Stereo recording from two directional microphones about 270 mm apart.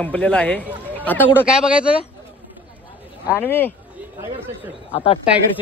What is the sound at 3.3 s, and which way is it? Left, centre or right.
Speech, centre.